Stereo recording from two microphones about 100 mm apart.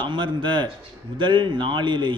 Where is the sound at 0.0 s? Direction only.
50° right (ahead or behind).